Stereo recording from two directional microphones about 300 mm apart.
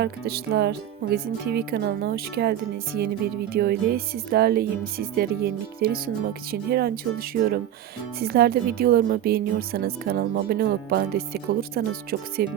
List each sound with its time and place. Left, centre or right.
0.0 s speech: right